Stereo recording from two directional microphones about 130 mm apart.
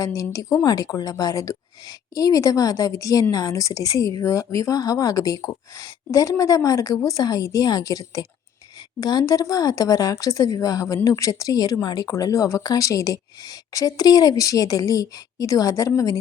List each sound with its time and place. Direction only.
0.0 s a woman's voice: 25° left (ahead or behind)